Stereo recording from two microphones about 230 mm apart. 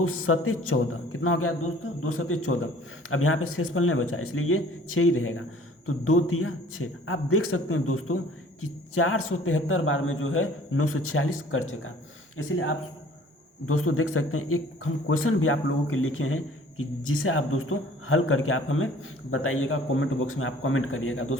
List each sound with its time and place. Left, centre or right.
0.0 s a man's voice: left